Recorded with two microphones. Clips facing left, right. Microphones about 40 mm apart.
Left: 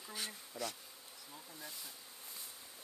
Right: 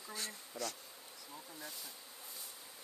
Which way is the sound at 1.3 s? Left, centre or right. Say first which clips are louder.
Right 2 dB; centre.